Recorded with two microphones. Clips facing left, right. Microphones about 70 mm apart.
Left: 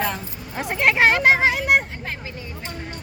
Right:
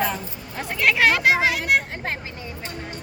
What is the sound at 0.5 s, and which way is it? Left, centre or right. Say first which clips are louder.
Speech: left 2 dB; left.